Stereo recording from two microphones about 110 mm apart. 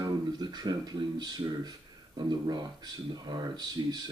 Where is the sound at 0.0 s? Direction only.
40° right (ahead or behind).